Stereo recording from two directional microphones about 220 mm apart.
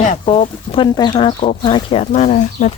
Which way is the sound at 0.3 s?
25° left (ahead or behind).